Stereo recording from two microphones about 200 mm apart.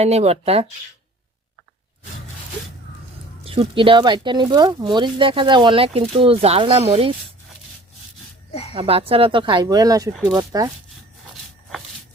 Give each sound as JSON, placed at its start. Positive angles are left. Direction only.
{"t": 0.0, "sound": "speech", "side_deg": -30}
{"t": 3.4, "sound": "speech", "side_deg": -25}
{"t": 8.7, "sound": "speech", "side_deg": -30}